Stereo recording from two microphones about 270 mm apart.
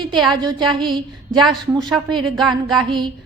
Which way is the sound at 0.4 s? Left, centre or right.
Centre.